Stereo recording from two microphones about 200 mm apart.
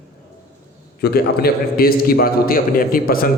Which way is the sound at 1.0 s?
50° left (ahead or behind).